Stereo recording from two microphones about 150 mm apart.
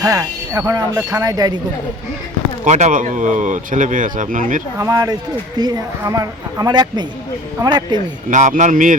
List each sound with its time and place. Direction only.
0.0 s speech: 20° right (ahead or behind)
2.6 s speech: 50° right (ahead or behind)
4.8 s speech: 20° right (ahead or behind)
8.3 s speech: 55° right (ahead or behind)